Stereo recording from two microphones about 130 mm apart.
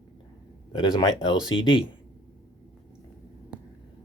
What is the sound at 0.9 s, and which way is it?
Speech, 30° left (ahead or behind).